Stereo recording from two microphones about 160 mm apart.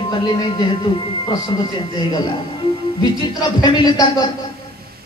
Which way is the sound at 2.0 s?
25° left (ahead or behind).